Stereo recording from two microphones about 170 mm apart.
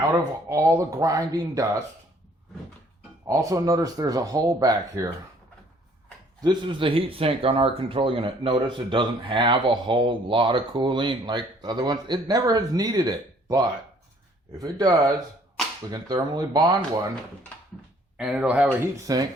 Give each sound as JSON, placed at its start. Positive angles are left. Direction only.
{"t": 0.0, "sound": "speech", "side_deg": -20}
{"t": 3.2, "sound": "speech", "side_deg": -20}
{"t": 6.4, "sound": "speech", "side_deg": -25}
{"t": 18.2, "sound": "speech", "side_deg": -5}
{"t": 19.0, "sound": "speech", "side_deg": -20}